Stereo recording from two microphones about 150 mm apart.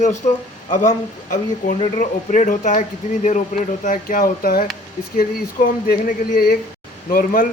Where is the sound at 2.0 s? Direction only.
55° left (ahead or behind); by 6.5 s 85° left.